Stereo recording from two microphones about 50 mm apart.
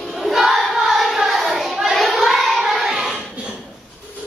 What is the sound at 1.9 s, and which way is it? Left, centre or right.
Child singing, centre.